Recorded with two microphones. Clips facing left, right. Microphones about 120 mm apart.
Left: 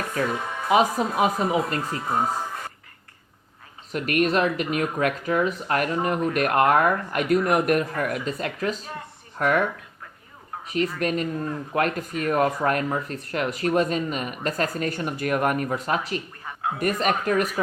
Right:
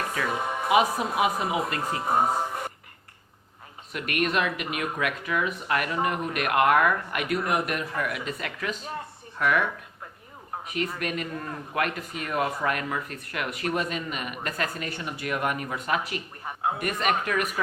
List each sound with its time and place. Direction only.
0.7 s speech: 35° left (ahead or behind)
1.5 s speech: centre (ahead or behind)
1.9 s speech: 25° right (ahead or behind)
3.9 s speech: 40° left (ahead or behind)
10.7 s speech: 35° left (ahead or behind)